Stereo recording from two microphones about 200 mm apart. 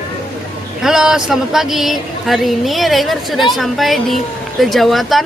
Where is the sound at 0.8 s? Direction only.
Centre (ahead or behind).